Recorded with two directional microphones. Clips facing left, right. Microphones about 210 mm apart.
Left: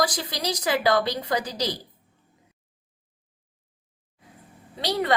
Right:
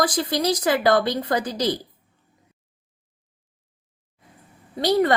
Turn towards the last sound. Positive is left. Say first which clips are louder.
# right 7 dB
turn(degrees=-50)  # may be behind; listen again after turning